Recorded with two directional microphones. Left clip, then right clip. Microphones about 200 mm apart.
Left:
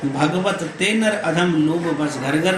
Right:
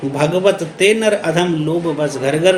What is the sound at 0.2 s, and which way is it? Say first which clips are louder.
A man's voice: right 7 dB; 50° right (ahead or behind).